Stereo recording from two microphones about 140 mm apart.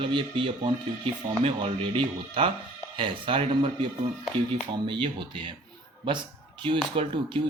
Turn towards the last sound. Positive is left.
turn(degrees=-35)  # may be behind; listen again after turning